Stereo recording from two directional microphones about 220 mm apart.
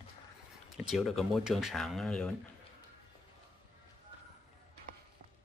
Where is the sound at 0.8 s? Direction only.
Centre (ahead or behind).